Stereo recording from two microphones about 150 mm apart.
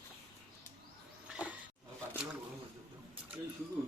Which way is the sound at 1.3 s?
10° right (ahead or behind).